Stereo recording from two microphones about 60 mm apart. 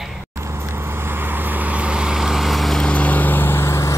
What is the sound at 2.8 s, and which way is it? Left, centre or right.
Vehicle, left.